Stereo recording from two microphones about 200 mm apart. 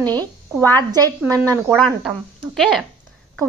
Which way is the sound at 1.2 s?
15° right (ahead or behind).